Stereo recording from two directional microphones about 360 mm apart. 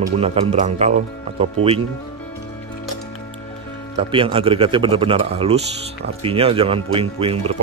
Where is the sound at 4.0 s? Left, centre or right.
Centre.